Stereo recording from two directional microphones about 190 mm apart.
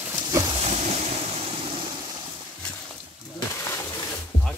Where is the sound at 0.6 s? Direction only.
35° right (ahead or behind).